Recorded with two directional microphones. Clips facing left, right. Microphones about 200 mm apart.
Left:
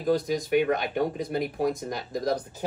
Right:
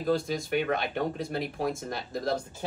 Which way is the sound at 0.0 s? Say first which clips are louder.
Left 3 dB; 15° left (ahead or behind).